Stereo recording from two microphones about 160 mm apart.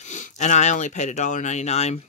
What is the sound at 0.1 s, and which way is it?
Speech, 50° left (ahead or behind).